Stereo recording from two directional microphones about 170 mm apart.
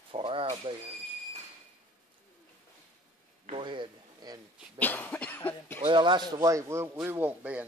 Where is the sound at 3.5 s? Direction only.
30° right (ahead or behind).